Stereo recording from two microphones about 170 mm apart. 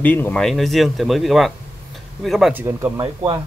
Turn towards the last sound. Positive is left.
turn(degrees=-25)  # may be behind; listen again after turning